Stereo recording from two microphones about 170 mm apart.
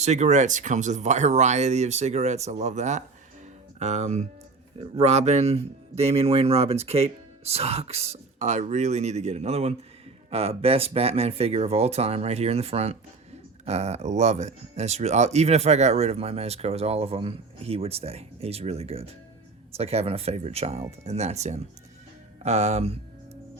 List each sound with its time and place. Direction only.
0.0 s speech: 40° right (ahead or behind)